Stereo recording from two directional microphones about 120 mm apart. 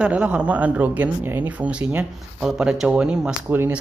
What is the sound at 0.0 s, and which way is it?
Speech, 10° right (ahead or behind).